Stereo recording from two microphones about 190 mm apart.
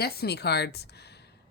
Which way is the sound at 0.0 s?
55° left (ahead or behind).